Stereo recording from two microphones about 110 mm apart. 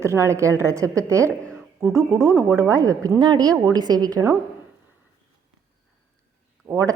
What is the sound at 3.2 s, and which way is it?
A woman's voice, 40° right (ahead or behind).